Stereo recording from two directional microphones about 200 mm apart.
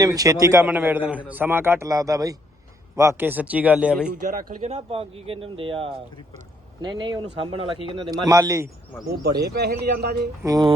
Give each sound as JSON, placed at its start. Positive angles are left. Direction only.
{"t": 0.0, "sound": "speech", "side_deg": -20}
{"t": 4.4, "sound": "speech", "side_deg": -30}
{"t": 9.6, "sound": "a man's voice", "side_deg": -55}
{"t": 10.4, "sound": "speech", "side_deg": -20}